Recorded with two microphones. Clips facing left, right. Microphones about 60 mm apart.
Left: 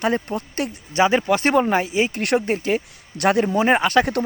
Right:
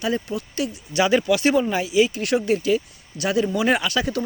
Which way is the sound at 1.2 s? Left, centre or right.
Left.